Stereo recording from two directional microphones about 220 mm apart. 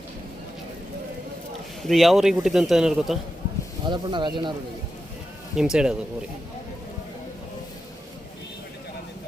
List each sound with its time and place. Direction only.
1.8 s a man's voice: centre (ahead or behind)
3.8 s speech: 20° right (ahead or behind)
5.5 s a man's voice: 5° right (ahead or behind)